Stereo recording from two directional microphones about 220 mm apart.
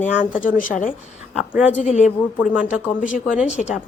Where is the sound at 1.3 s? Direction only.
Centre (ahead or behind).